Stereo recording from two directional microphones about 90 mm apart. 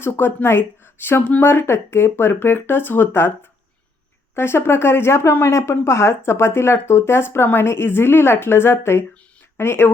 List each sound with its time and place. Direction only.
0.0 s speech: 25° left (ahead or behind)
4.4 s speech: 25° left (ahead or behind)